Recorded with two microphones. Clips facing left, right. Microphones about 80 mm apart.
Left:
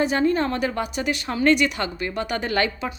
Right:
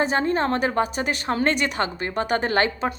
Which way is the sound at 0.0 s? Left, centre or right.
Right.